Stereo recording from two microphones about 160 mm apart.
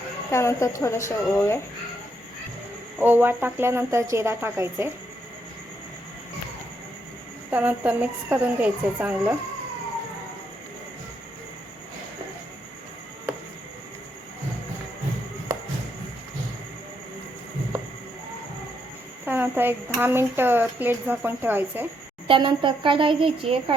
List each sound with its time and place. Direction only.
0.3 s a woman's voice: 20° left (ahead or behind)
3.0 s speech: 15° right (ahead or behind)
7.5 s speech: 10° right (ahead or behind)
19.2 s speech: 15° right (ahead or behind)
22.3 s a woman's voice: 30° right (ahead or behind)